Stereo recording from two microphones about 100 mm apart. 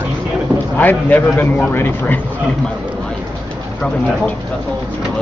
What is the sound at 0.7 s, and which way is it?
A man's voice, 15° left (ahead or behind).